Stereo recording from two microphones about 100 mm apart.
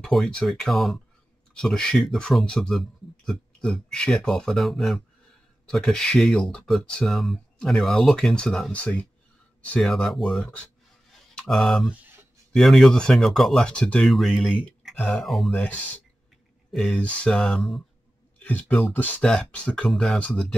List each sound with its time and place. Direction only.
0.0 s speech: 5° left (ahead or behind)
10.4 s speech: 15° left (ahead or behind)
11.3 s speech: 5° left (ahead or behind)
15.0 s speech: 10° left (ahead or behind)
15.2 s speech: centre (ahead or behind)
16.7 s speech: centre (ahead or behind)
18.8 s speech: 15° left (ahead or behind)